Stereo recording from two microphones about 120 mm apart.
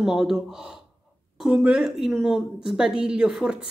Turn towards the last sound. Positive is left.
turn(degrees=-5)  # may be behind; listen again after turning